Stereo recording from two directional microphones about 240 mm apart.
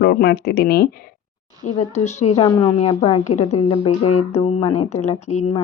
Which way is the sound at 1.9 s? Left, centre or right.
Left.